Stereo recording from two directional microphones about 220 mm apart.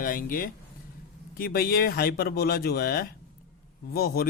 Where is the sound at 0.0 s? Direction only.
40° left (ahead or behind).